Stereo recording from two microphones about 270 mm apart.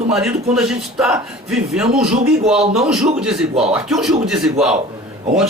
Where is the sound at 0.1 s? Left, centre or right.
Centre.